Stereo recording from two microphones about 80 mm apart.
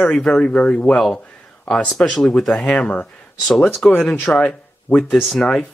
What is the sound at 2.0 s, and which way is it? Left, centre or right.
Speech, centre.